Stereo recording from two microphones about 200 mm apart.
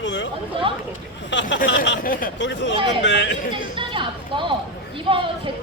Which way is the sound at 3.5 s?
25° right (ahead or behind).